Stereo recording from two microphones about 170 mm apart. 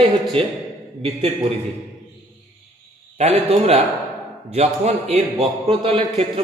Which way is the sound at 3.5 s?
40° right (ahead or behind).